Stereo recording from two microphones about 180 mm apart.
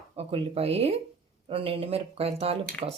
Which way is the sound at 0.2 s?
30° right (ahead or behind).